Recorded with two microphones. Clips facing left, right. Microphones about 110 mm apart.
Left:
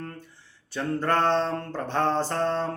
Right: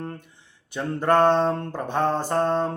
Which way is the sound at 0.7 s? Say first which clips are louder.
Right 4 dB; 15° right (ahead or behind).